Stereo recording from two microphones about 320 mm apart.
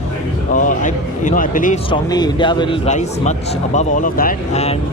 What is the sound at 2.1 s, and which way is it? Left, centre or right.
Speech, centre.